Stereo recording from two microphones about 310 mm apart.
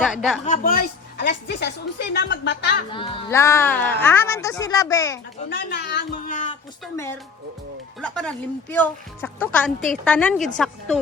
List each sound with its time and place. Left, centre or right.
0.0 s speech: centre
0.4 s a woman's voice: left
2.9 s speech: centre
5.5 s a woman's voice: left
6.8 s speech: centre